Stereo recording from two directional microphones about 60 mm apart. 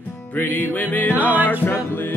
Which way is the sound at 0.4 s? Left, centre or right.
Left.